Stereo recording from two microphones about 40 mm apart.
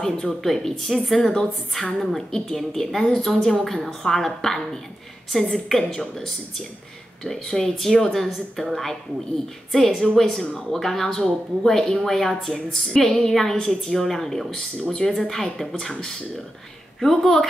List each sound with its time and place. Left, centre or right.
0.0 s a woman's voice: centre
7.2 s a woman's voice: centre
17.0 s speech: centre